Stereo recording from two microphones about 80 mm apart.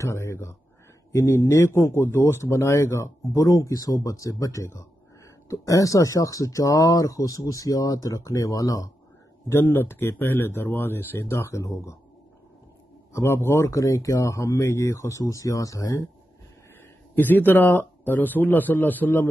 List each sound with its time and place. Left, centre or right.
0.0 s speech: left
9.5 s speech: left
13.1 s speech: left
17.1 s speech: left